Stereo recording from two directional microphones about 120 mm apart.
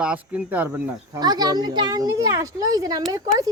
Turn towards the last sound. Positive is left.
turn(degrees=-30)  # may be behind; listen again after turning